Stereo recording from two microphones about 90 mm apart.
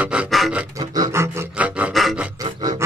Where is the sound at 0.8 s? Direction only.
45° right (ahead or behind).